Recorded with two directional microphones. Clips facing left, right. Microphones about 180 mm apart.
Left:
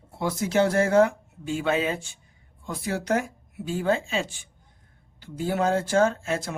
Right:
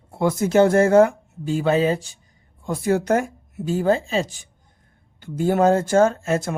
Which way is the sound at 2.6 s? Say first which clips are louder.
Right 7 dB; 45° right (ahead or behind).